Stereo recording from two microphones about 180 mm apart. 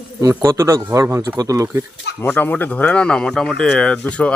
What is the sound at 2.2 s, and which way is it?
Speech, 10° left (ahead or behind).